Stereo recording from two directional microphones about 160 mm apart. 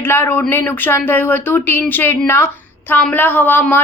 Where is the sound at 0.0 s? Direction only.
15° left (ahead or behind).